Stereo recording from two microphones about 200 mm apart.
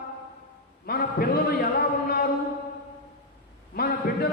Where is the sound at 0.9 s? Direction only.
50° left (ahead or behind).